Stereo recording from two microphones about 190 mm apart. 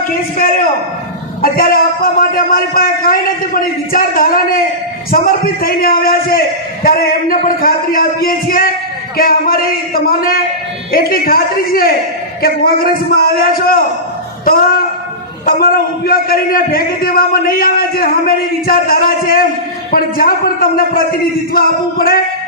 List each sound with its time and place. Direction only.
1.4 s a man's voice: 50° left (ahead or behind)
15.4 s a man's voice: 50° left (ahead or behind)